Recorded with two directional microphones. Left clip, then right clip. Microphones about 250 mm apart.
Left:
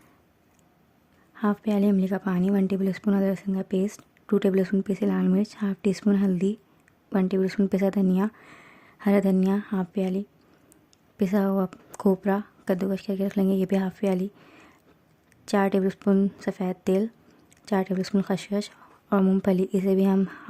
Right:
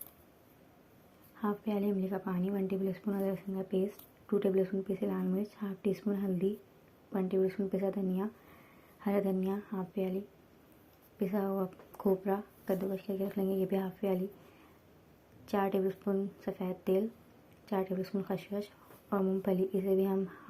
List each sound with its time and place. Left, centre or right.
1.4 s speech: left
15.4 s speech: left